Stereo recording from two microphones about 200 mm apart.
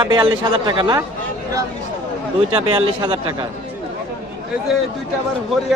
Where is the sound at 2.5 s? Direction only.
25° right (ahead or behind).